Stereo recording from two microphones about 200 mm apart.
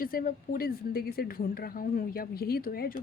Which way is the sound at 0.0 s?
45° left (ahead or behind).